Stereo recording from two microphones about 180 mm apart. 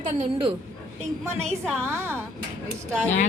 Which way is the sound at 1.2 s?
15° right (ahead or behind).